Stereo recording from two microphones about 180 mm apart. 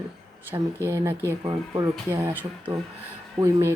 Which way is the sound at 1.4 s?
25° right (ahead or behind).